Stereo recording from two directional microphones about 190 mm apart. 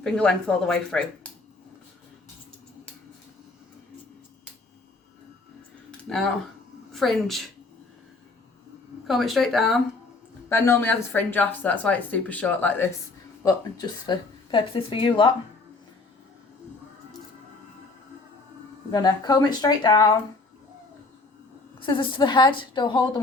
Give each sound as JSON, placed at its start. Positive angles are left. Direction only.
{"t": 0.0, "sound": "speech", "side_deg": 5}
{"t": 6.1, "sound": "speech", "side_deg": 0}
{"t": 9.0, "sound": "speech", "side_deg": 0}
{"t": 10.5, "sound": "speech", "side_deg": 10}
{"t": 13.4, "sound": "speech", "side_deg": 20}
{"t": 18.9, "sound": "speech", "side_deg": 20}
{"t": 21.8, "sound": "speech", "side_deg": 25}